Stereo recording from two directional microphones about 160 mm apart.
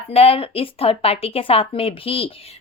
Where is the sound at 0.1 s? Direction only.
40° left (ahead or behind).